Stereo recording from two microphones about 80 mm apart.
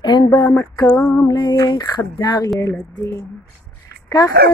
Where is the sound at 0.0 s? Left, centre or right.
Left.